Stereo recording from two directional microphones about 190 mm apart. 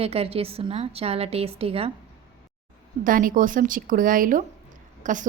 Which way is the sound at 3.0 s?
45° right (ahead or behind).